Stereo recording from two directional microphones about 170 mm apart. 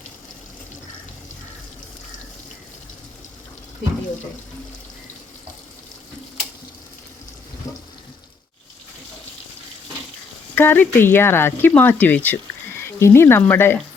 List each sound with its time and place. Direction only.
7.6 s water tap: 20° left (ahead or behind)
10.5 s speech: 10° left (ahead or behind)